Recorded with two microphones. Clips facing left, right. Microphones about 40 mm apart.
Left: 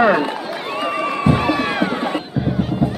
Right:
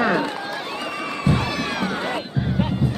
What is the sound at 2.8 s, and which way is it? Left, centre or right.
Run, centre.